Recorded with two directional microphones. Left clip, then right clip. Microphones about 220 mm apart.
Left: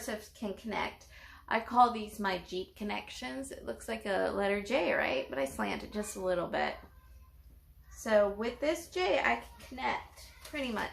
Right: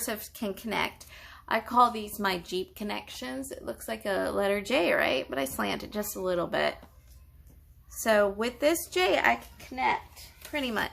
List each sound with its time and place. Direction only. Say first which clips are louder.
0.0 s a woman's voice: right 5 dB; 20° right (ahead or behind)
8.0 s a woman's voice: right 4 dB; 20° right (ahead or behind)
10.5 s a woman's voice: right 6 dB; 10° right (ahead or behind)